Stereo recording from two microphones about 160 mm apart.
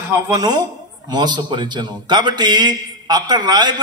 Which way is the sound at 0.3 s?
25° right (ahead or behind).